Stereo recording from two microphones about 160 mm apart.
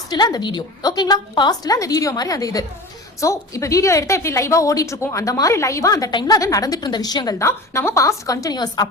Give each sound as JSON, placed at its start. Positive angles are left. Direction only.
{"t": 0.1, "sound": "a woman's voice", "side_deg": 25}